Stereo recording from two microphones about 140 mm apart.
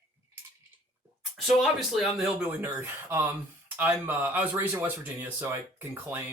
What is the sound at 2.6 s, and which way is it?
Cough, 15° right (ahead or behind).